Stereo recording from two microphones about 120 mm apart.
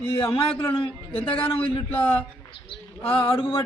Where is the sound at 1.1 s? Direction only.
50° left (ahead or behind).